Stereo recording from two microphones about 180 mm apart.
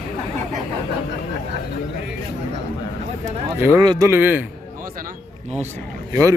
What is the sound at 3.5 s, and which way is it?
Speech, 15° right (ahead or behind).